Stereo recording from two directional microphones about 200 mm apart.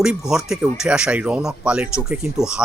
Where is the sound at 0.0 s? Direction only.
5° right (ahead or behind).